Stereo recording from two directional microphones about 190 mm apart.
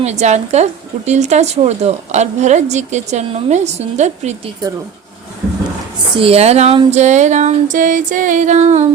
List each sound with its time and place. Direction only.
0.0 s a woman's voice: 35° right (ahead or behind)
6.1 s a woman's voice: 30° right (ahead or behind)